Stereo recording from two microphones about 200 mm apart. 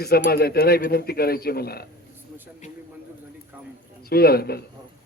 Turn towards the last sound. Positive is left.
turn(degrees=50)  # may be behind; listen again after turning